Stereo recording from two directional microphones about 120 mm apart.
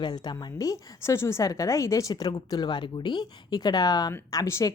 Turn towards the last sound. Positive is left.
turn(degrees=25)  # may be behind; listen again after turning